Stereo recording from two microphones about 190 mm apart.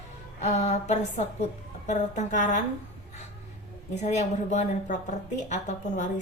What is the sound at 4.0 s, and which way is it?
A woman's voice, 35° left (ahead or behind).